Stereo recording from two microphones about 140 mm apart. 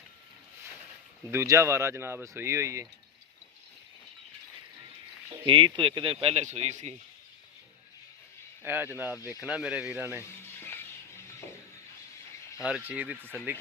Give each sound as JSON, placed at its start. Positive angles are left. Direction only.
{"t": 1.3, "sound": "speech", "side_deg": -20}
{"t": 5.5, "sound": "speech", "side_deg": -35}
{"t": 8.6, "sound": "a man's voice", "side_deg": -15}
{"t": 10.6, "sound": "music", "side_deg": 15}
{"t": 12.6, "sound": "a man's voice", "side_deg": -10}